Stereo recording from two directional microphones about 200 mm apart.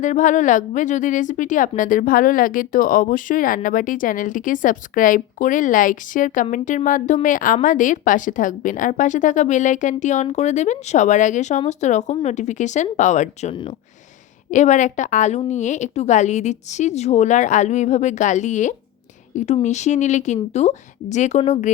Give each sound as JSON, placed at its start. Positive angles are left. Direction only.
{"t": 0.0, "sound": "a woman's voice", "side_deg": 40}